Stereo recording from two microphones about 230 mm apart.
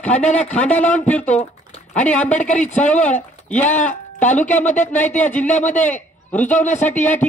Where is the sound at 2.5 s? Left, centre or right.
Left.